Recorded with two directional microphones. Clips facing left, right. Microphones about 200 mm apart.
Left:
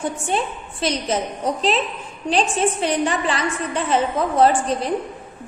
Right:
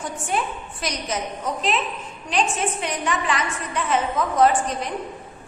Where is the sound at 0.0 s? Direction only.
30° left (ahead or behind).